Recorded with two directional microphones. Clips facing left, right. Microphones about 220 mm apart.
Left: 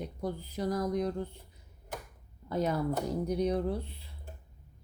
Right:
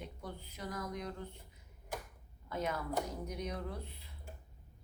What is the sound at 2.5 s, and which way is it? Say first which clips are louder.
A woman's voice: left 7 dB; 35° left (ahead or behind).